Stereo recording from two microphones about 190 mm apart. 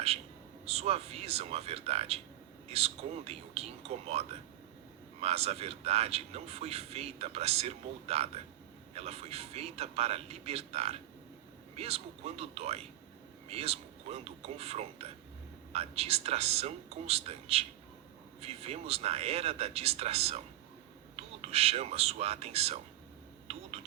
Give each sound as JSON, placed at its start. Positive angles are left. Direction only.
{"t": 0.6, "sound": "a man's voice", "side_deg": -35}
{"t": 21.4, "sound": "a man's voice", "side_deg": -30}